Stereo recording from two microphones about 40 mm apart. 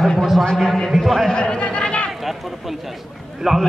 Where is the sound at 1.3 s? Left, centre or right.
Left.